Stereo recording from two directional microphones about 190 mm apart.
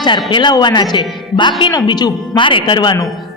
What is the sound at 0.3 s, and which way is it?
Speech, 25° left (ahead or behind).